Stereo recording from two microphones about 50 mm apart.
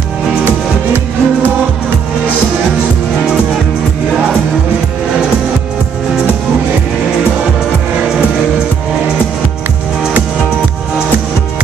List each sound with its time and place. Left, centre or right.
0.5 s music: right